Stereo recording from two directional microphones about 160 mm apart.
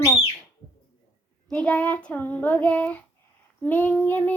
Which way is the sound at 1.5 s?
10° left (ahead or behind).